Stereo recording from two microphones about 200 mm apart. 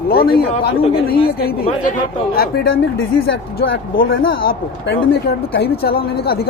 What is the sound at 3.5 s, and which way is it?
Speech, 65° left (ahead or behind).